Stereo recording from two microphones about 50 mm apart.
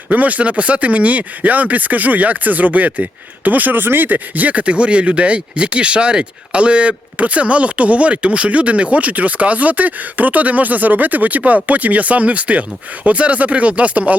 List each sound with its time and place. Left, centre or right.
0.1 s speech: right